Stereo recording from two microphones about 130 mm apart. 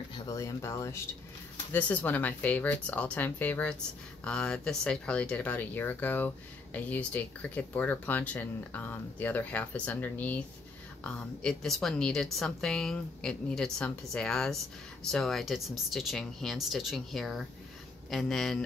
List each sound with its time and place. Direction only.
0.3 s speech: 25° left (ahead or behind)
1.7 s a woman's voice: 15° left (ahead or behind)